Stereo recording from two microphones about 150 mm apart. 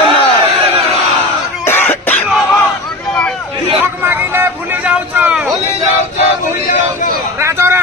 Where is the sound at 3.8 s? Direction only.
15° right (ahead or behind).